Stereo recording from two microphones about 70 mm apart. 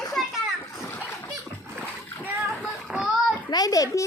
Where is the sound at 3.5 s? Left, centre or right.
Left.